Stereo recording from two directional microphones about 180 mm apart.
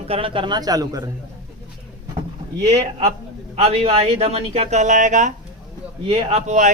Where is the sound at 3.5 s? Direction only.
35° right (ahead or behind).